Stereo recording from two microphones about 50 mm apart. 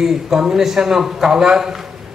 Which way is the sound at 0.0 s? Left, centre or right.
Centre.